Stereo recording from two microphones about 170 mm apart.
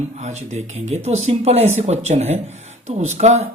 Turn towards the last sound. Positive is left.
turn(degrees=-40)  # may be behind; listen again after turning